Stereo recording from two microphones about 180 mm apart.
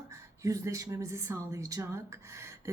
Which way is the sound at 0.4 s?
15° right (ahead or behind).